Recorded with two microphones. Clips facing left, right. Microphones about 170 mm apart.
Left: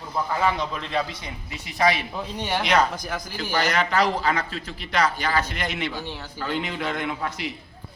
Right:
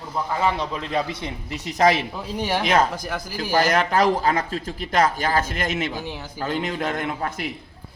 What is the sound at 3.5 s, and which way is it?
Speech, 45° right (ahead or behind).